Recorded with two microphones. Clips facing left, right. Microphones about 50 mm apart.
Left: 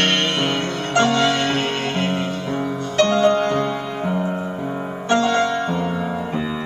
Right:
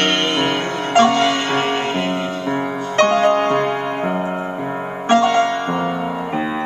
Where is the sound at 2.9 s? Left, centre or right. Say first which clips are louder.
Right 2 dB; right.